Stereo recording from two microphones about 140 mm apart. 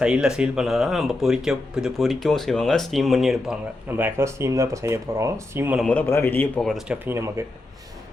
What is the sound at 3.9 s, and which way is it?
Speech, 15° right (ahead or behind).